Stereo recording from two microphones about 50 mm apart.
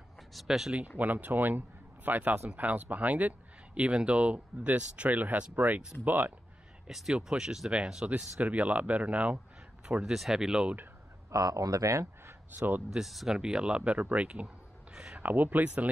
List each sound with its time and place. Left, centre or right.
0.3 s speech: centre
0.7 s speech: right
6.9 s speech: centre
7.2 s speech: centre
8.4 s speech: right
10.1 s speech: centre
11.2 s speech: right
12.4 s speech: right
13.0 s speech: centre
13.4 s speech: centre
15.1 s speech: right